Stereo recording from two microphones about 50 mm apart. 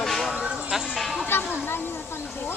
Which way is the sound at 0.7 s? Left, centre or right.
Centre.